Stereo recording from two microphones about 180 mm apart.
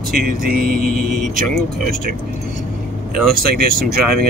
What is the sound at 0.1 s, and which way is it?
Speech, 50° right (ahead or behind).